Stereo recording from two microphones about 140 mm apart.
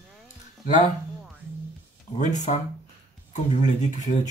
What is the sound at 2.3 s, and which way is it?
Speech, 60° left (ahead or behind).